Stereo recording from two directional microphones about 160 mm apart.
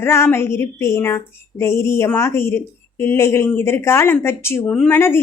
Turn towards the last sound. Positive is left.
turn(degrees=15)  # may be behind; listen again after turning